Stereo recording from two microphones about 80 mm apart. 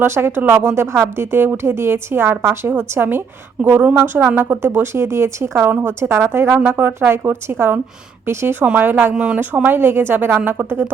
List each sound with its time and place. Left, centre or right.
0.0 s a woman's voice: right
9.1 s a woman's voice: centre; by 10.9 s right